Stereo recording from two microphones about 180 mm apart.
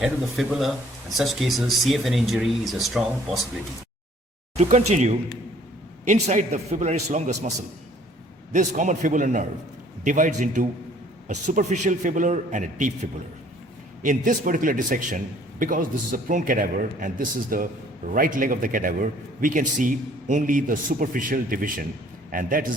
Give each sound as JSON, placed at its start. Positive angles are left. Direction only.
{"t": 0.0, "sound": "speech", "side_deg": 0}
{"t": 4.5, "sound": "a man's voice", "side_deg": -35}
{"t": 8.5, "sound": "a man's voice", "side_deg": -45}
{"t": 14.0, "sound": "a man's voice", "side_deg": -45}